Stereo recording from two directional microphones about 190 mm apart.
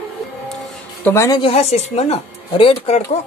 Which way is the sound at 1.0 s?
15° left (ahead or behind).